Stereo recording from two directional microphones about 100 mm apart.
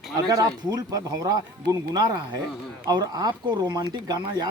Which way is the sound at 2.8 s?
40° right (ahead or behind).